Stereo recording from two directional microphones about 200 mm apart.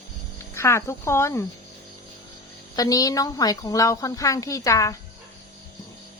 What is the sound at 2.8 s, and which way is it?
Speech, 20° left (ahead or behind).